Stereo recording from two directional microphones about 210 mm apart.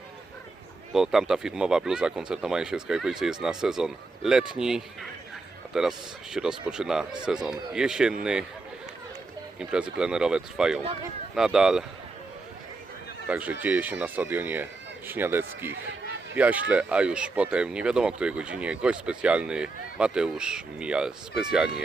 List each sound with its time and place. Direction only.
0.9 s speech: centre (ahead or behind)
9.6 s speech: 5° right (ahead or behind)
13.2 s speech: 5° right (ahead or behind)
15.7 s a sound: 60° right (ahead or behind)
16.4 s speech: 5° right (ahead or behind)